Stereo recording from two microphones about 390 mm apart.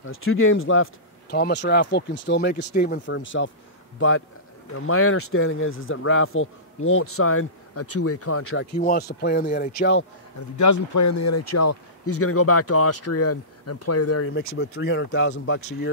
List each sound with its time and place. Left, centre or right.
0.0 s speech: left
4.7 s speech: left
10.6 s speech: left